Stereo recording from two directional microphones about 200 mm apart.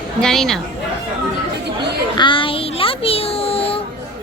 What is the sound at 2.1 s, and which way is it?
Child singing, 25° left (ahead or behind).